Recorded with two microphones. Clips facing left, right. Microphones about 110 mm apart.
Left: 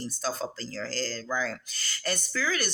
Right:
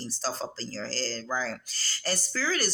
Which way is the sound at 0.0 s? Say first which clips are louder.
Left 1 dB; 30° right (ahead or behind).